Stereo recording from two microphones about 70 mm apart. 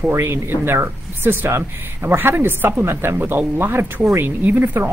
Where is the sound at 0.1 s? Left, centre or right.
Right.